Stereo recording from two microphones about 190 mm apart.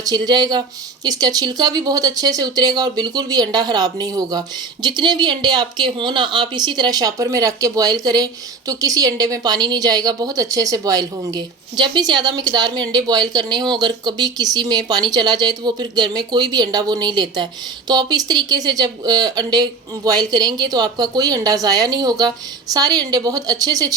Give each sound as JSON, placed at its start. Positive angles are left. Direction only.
{"t": 0.0, "sound": "a woman's voice", "side_deg": -20}